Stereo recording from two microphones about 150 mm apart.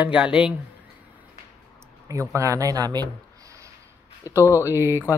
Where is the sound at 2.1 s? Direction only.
20° right (ahead or behind).